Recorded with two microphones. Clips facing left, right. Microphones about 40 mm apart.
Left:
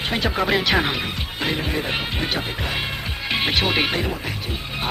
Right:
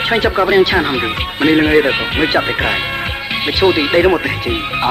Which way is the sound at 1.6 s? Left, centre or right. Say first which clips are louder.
Right 14 dB; right.